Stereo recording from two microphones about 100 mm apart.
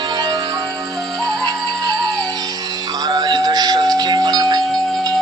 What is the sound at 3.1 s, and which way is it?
Music, 45° right (ahead or behind).